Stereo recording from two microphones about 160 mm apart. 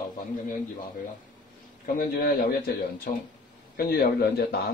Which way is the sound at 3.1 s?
70° left (ahead or behind).